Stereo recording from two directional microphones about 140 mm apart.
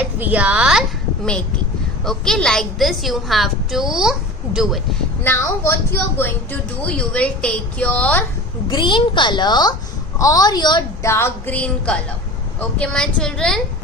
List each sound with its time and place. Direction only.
0.2 s a woman's voice: 10° right (ahead or behind)
5.2 s a woman's voice: 15° left (ahead or behind)
8.7 s a woman's voice: 35° left (ahead or behind)
11.0 s a woman's voice: 20° left (ahead or behind)